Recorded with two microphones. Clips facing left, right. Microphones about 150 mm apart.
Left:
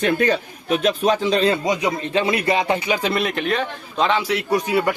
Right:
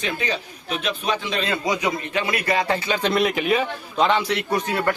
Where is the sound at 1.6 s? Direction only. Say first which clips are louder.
Left 2 dB; 25° left (ahead or behind).